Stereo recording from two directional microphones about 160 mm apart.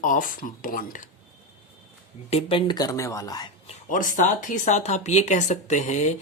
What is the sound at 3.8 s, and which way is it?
Speech, 55° left (ahead or behind).